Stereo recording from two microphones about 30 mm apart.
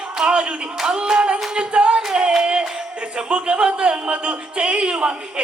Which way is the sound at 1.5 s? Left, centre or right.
Right.